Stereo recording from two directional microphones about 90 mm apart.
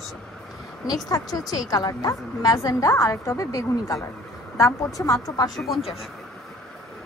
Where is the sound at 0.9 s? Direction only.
45° left (ahead or behind).